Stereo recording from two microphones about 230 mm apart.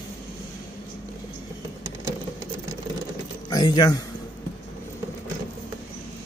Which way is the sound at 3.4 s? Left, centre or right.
Centre.